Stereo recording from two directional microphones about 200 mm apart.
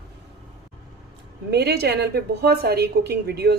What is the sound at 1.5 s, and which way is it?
A woman's voice, 55° right (ahead or behind).